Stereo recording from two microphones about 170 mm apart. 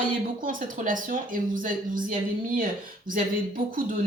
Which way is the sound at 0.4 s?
50° right (ahead or behind).